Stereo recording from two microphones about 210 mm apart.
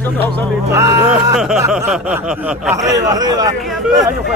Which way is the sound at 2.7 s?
15° right (ahead or behind).